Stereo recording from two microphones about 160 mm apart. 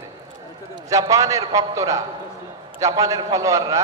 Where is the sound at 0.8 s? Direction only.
20° right (ahead or behind).